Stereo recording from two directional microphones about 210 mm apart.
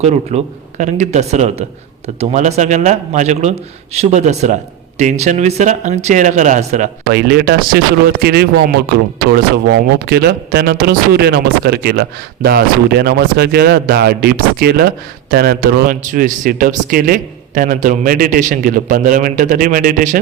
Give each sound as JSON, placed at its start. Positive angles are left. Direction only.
{"t": 0.0, "sound": "speech", "side_deg": -30}
{"t": 7.1, "sound": "speech", "side_deg": -50}